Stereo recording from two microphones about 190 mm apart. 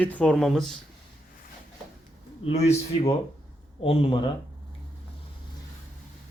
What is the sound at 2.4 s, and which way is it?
Speech, 35° left (ahead or behind).